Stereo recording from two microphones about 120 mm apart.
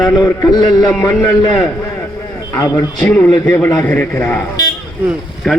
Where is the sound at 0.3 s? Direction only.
30° left (ahead or behind).